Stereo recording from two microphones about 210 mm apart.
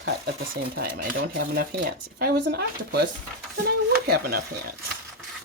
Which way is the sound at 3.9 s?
50° right (ahead or behind).